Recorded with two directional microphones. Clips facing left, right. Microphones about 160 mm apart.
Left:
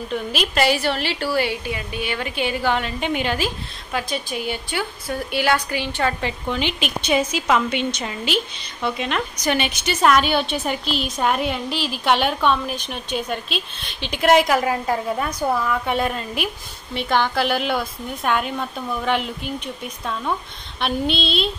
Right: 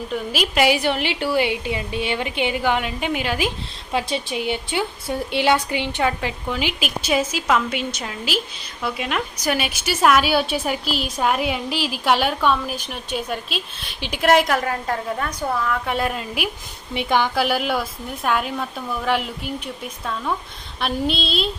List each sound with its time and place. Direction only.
0.1 s a woman's voice: 10° right (ahead or behind)
3.3 s a woman's voice: 20° right (ahead or behind)
6.2 s a woman's voice: 5° right (ahead or behind)